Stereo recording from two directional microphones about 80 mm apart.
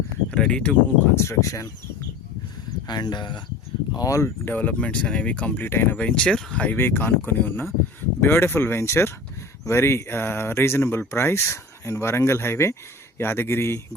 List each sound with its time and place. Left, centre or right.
0.3 s speech: centre
1.1 s speech: left
2.8 s speech: left
3.9 s speech: left
4.4 s speech: left
5.6 s speech: left
6.0 s speech: centre
6.7 s speech: left